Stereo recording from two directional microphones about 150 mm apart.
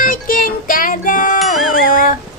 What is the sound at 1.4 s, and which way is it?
Music, centre (ahead or behind).